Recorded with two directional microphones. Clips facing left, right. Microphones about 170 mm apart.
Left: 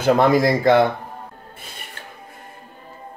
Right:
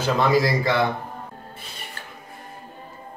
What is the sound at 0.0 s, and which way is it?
Speech, 55° left (ahead or behind).